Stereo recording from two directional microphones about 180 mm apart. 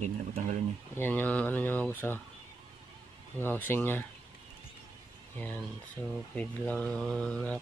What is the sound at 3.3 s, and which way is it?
Speech, 10° left (ahead or behind).